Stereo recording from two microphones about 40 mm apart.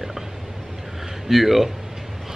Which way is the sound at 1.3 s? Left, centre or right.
Centre.